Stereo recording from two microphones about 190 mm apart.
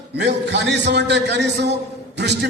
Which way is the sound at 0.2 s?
65° right (ahead or behind).